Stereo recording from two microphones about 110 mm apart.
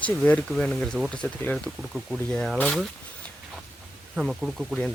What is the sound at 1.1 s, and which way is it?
Speech, 10° left (ahead or behind).